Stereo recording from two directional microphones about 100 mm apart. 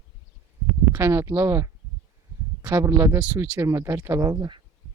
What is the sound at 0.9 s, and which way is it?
Speech, 25° right (ahead or behind).